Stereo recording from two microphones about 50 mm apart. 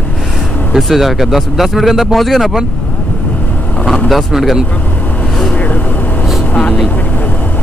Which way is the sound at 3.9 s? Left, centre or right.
Centre.